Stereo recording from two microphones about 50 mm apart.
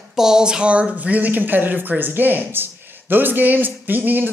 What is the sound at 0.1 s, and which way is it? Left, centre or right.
Speech, centre.